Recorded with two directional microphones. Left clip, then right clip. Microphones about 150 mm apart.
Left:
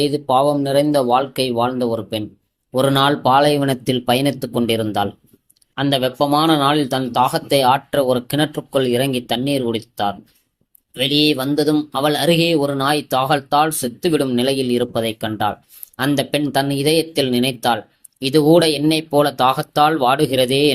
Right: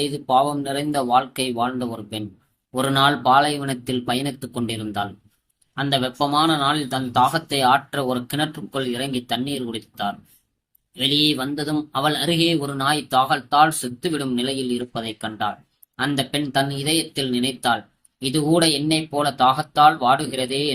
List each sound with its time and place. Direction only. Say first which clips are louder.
0.0 s speech: left 4 dB; 30° left (ahead or behind); by 20.7 s 45° left (ahead or behind)